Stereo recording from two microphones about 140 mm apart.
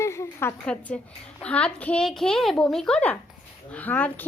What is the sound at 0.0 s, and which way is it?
A woman's voice, 20° left (ahead or behind).